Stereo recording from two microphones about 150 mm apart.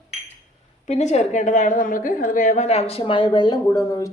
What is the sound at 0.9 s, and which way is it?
A woman's voice, 50° left (ahead or behind).